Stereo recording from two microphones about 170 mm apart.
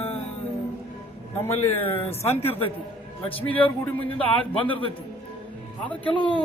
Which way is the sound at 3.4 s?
10° left (ahead or behind).